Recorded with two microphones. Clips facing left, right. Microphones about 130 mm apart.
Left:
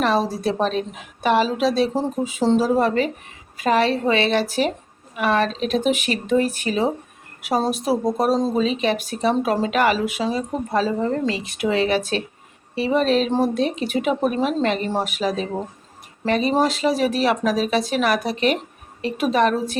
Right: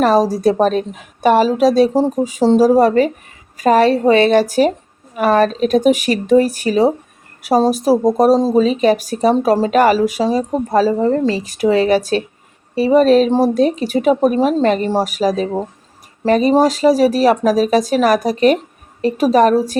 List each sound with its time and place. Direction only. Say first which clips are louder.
0.0 s a woman's voice: right 8 dB; 40° right (ahead or behind)